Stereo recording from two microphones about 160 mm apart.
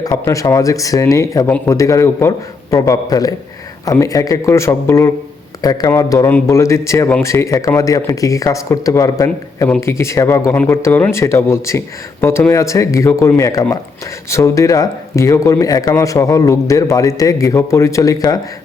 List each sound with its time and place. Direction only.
0.0 s speech: 20° left (ahead or behind)